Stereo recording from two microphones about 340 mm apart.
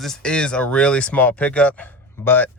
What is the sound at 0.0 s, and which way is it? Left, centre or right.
Speech, centre.